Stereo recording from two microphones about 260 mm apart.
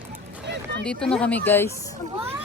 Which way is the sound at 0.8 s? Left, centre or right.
Centre.